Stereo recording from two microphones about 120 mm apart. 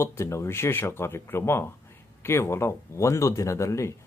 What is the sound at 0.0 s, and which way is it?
Speech, 25° left (ahead or behind).